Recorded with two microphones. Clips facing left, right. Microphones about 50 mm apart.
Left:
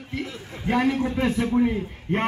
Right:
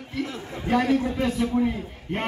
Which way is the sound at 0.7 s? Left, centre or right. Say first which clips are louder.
Even; left.